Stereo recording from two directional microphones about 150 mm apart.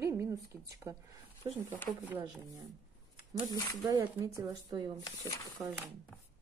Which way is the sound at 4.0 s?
20° right (ahead or behind).